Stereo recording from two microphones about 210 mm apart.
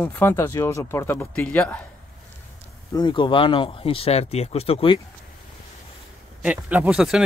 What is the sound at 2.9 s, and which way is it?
Speech, 20° left (ahead or behind).